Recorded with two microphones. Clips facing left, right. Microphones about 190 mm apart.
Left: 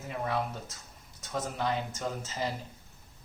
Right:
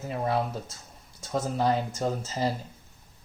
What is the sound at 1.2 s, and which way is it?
Speech, 35° right (ahead or behind).